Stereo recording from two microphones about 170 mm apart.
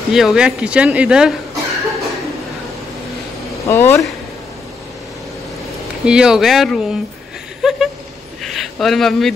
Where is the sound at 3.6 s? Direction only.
15° left (ahead or behind).